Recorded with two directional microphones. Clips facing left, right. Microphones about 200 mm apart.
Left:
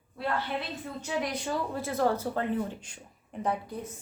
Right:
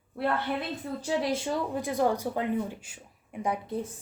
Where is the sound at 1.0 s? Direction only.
30° right (ahead or behind); by 3.5 s 10° right (ahead or behind).